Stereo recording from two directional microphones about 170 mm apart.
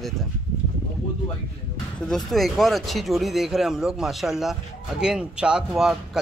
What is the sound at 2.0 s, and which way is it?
Speech, centre (ahead or behind).